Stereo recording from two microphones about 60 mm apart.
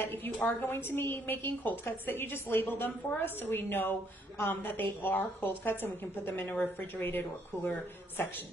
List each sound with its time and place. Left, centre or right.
0.0 s a woman's voice: left